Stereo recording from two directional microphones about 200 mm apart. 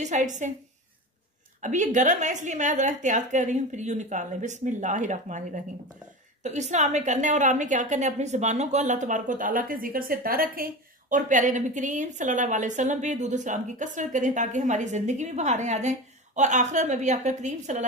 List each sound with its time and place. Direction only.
0.0 s a woman's voice: 35° right (ahead or behind)
1.6 s a woman's voice: 40° right (ahead or behind)